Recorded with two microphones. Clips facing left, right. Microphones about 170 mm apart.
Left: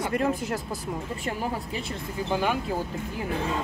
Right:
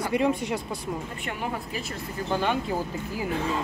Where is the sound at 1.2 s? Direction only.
35° left (ahead or behind).